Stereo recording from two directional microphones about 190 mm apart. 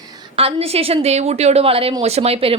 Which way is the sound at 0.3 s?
30° right (ahead or behind).